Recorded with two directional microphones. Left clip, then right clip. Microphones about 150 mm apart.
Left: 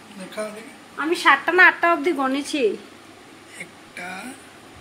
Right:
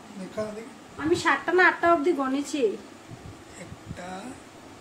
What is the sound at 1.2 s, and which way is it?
A woman's voice, 25° left (ahead or behind).